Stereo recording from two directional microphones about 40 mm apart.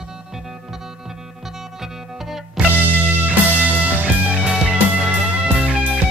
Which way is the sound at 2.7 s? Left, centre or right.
Right.